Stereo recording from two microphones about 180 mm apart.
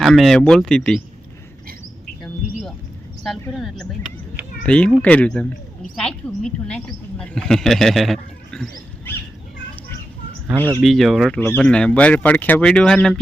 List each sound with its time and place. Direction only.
0.0 s speech: centre (ahead or behind)
2.2 s bird: centre (ahead or behind)
3.5 s a woman's voice: centre (ahead or behind)
10.8 s speech: centre (ahead or behind)